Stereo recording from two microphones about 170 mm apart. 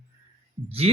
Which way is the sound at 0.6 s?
35° right (ahead or behind).